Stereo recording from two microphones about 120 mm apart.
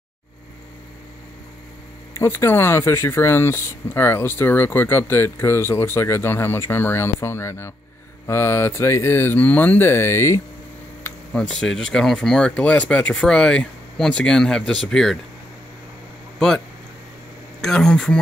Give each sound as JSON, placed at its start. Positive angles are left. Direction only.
{"t": 2.1, "sound": "speech", "side_deg": 20}
{"t": 11.1, "sound": "speech", "side_deg": 5}
{"t": 16.3, "sound": "speech", "side_deg": 5}